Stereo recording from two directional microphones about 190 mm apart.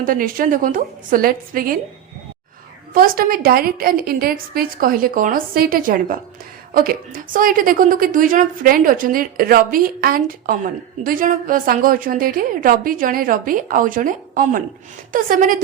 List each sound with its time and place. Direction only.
0.0 s a woman's voice: 45° right (ahead or behind)
2.9 s a woman's voice: 50° right (ahead or behind)